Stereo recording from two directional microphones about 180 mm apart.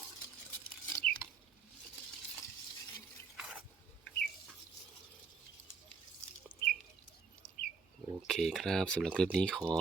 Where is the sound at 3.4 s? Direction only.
5° right (ahead or behind).